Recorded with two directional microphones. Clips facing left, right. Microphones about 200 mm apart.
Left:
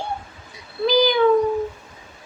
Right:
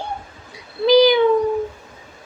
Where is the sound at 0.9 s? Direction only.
75° right (ahead or behind).